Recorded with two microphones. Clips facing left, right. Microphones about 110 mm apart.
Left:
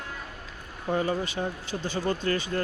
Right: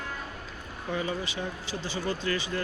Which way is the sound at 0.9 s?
45° left (ahead or behind).